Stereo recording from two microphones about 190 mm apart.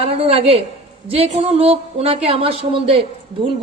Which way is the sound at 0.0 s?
30° right (ahead or behind).